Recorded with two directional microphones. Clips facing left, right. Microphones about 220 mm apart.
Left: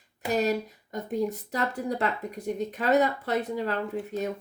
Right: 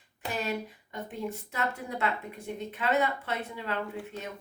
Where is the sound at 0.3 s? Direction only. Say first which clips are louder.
Left 7 dB; 40° left (ahead or behind).